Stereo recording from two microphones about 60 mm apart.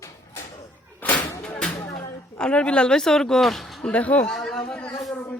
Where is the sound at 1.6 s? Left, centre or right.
Centre.